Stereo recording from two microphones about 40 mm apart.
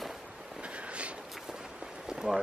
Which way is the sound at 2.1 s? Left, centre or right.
Centre.